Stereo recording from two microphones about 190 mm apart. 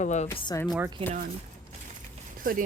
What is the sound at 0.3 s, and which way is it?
Speech, 20° left (ahead or behind).